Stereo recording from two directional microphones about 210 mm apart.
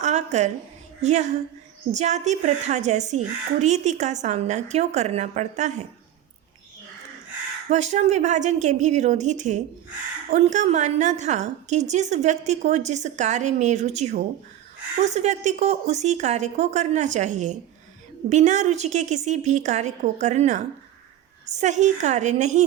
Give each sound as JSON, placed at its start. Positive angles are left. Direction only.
{"t": 0.0, "sound": "a sound", "side_deg": -35}
{"t": 1.0, "sound": "a woman's voice", "side_deg": -35}
{"t": 7.7, "sound": "a woman's voice", "side_deg": -35}